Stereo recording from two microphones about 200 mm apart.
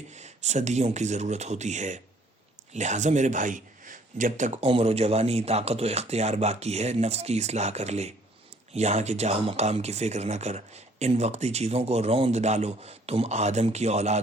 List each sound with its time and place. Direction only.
0.1 s speech: 35° right (ahead or behind)